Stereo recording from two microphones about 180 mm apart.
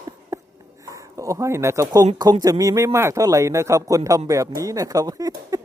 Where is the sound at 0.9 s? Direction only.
15° right (ahead or behind).